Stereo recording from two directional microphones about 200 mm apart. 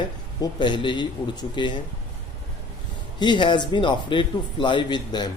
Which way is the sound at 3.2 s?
25° left (ahead or behind).